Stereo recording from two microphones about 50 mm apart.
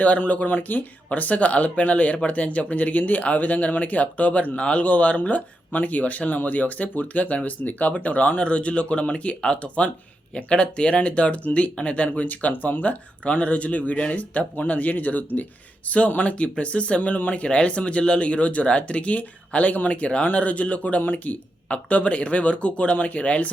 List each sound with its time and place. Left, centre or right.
0.0 s speech: left